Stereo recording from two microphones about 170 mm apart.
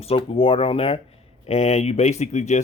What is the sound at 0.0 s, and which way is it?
Speech, 35° left (ahead or behind).